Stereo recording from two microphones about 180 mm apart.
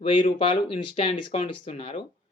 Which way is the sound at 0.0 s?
30° left (ahead or behind).